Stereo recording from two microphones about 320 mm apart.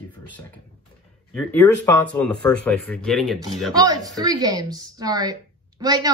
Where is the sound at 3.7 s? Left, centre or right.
Centre.